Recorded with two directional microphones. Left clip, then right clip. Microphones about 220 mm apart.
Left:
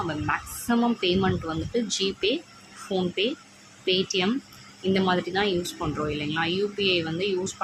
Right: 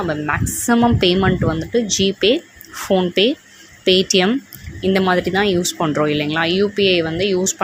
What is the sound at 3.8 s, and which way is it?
Speech, 30° right (ahead or behind).